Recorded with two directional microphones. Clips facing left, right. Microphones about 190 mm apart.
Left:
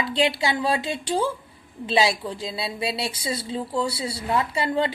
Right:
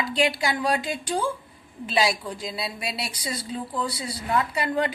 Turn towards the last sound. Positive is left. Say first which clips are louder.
# left 1 dB
turn(degrees=25)  # may be behind; listen again after turning